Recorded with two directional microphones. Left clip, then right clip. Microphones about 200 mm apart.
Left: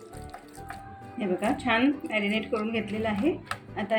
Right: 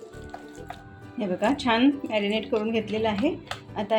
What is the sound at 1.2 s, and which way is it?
A woman's voice, 50° right (ahead or behind).